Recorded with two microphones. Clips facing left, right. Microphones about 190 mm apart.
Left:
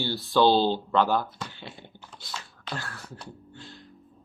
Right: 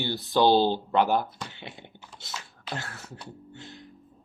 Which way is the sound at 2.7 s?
25° right (ahead or behind).